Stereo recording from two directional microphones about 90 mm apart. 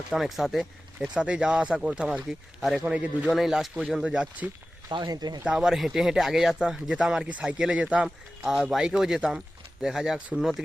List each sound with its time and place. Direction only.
0.1 s speech: centre (ahead or behind)
2.8 s speech: 15° right (ahead or behind)
3.3 s speech: 5° right (ahead or behind)
4.0 s speech: 10° right (ahead or behind)
4.9 s speech: 50° right (ahead or behind)
5.4 s speech: 10° right (ahead or behind)
8.7 s speech: 5° right (ahead or behind)